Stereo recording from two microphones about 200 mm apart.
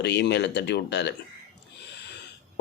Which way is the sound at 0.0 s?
60° left (ahead or behind).